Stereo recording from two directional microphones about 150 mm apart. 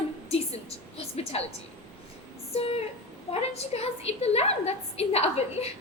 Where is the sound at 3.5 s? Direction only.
45° left (ahead or behind).